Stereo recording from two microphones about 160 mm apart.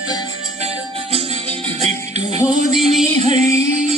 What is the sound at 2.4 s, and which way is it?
Music, centre (ahead or behind).